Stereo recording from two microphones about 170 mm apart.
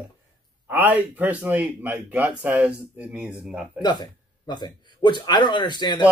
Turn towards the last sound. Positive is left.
turn(degrees=25)  # may be behind; listen again after turning